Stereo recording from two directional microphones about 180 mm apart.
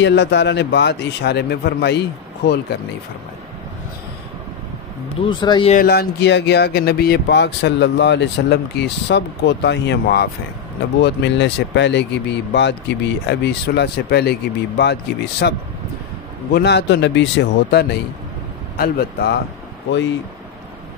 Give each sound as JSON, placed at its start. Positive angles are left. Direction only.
{"t": 0.0, "sound": "speech", "side_deg": 75}
{"t": 5.2, "sound": "speech", "side_deg": 25}
{"t": 5.9, "sound": "speech", "side_deg": 65}
{"t": 11.0, "sound": "speech", "side_deg": 75}
{"t": 16.5, "sound": "speech", "side_deg": 70}